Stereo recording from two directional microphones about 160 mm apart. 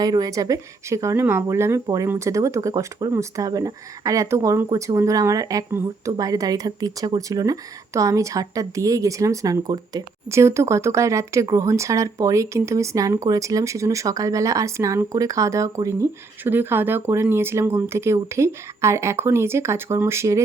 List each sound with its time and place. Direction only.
0.0 s speech: 25° right (ahead or behind)